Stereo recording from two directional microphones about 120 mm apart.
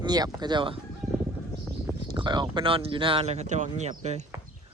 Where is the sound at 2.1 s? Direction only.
40° right (ahead or behind).